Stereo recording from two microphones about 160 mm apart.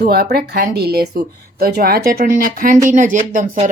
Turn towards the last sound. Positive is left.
turn(degrees=-55)  # may be behind; listen again after turning